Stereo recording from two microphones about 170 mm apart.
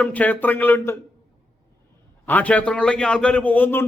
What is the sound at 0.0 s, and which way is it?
Speech, 10° left (ahead or behind).